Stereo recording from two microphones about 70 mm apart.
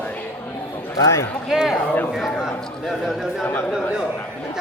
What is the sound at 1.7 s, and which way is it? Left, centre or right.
Speech, left.